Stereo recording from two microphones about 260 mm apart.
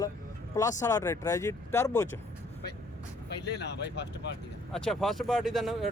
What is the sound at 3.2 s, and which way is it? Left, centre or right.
Speech, left.